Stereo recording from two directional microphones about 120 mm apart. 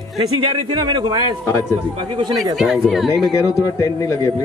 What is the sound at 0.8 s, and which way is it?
Speech, 40° right (ahead or behind).